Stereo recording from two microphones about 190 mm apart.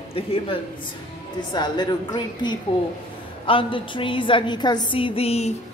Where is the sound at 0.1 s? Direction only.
30° left (ahead or behind).